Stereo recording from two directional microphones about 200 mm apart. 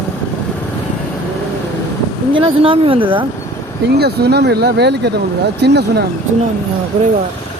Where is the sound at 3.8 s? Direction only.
55° right (ahead or behind).